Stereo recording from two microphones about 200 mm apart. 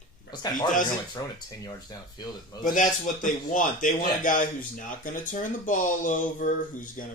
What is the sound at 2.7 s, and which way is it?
Speech, 40° left (ahead or behind).